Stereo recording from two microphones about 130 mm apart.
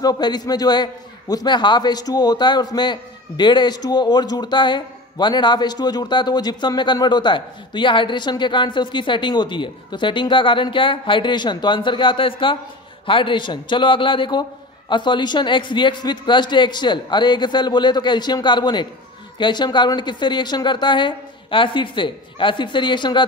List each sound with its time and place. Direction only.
0.0 s a man's voice: 30° left (ahead or behind)